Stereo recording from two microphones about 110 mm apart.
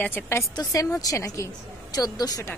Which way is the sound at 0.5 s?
30° left (ahead or behind).